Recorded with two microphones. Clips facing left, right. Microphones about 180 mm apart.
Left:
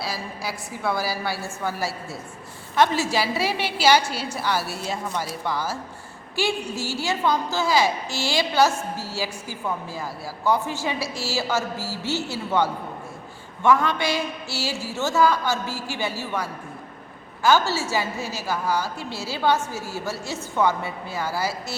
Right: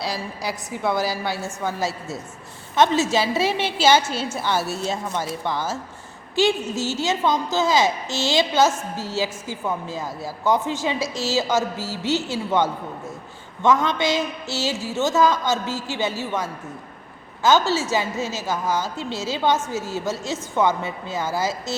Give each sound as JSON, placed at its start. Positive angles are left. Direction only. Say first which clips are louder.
{"t": 0.0, "sound": "a woman's voice", "louder": "right 3 dB", "side_deg": -20}